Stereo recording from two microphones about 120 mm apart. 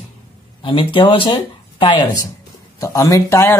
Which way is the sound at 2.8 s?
30° left (ahead or behind).